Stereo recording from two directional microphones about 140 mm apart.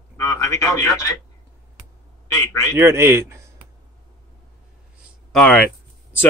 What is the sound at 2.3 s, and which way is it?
Speech, 25° left (ahead or behind).